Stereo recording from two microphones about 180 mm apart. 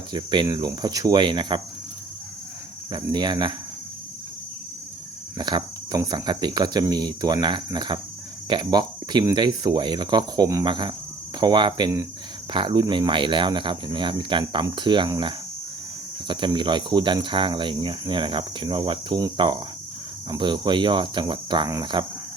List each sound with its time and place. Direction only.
0.1 s speech: 25° right (ahead or behind)
2.9 s speech: 25° right (ahead or behind)
5.4 s speech: 25° right (ahead or behind)